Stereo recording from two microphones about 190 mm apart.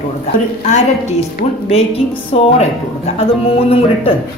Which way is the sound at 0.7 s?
35° left (ahead or behind).